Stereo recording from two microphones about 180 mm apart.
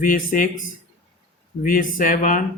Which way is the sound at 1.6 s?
50° left (ahead or behind).